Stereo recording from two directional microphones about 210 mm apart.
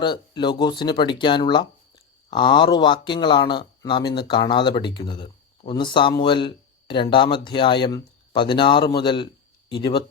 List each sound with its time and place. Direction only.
0.0 s speech: 20° left (ahead or behind)